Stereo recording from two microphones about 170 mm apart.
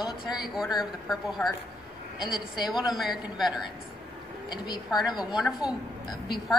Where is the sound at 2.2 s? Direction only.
25° left (ahead or behind).